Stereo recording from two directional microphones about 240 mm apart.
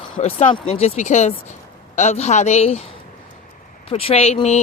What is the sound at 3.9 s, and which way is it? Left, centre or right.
Speech, left.